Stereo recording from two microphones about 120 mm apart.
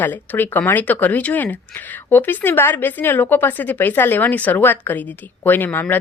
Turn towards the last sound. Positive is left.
turn(degrees=15)  # may be behind; listen again after turning